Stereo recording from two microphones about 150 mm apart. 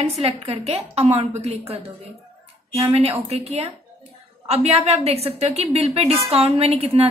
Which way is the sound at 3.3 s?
45° right (ahead or behind).